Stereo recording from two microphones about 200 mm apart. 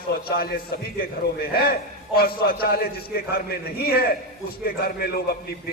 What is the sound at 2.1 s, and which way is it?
A man's voice, 50° left (ahead or behind).